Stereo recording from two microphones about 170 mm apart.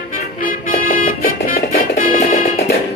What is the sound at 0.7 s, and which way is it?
Music, 55° left (ahead or behind).